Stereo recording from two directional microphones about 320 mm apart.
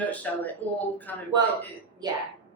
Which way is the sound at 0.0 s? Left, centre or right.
Centre.